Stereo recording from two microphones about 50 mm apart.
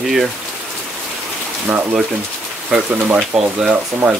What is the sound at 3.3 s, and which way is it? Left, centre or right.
Speech, centre.